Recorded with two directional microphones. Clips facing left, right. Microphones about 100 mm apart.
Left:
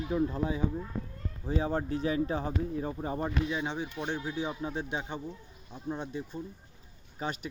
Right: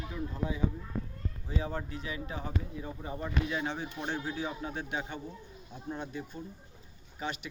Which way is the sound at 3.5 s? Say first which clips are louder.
Left 1 dB; 15° left (ahead or behind).